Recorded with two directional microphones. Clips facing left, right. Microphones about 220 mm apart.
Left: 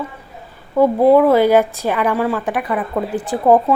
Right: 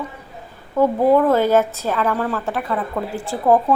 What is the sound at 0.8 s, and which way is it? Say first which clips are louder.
A woman's voice: left 4 dB; 10° left (ahead or behind).